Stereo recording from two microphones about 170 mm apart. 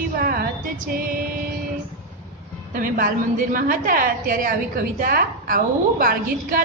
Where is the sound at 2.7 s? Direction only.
55° right (ahead or behind).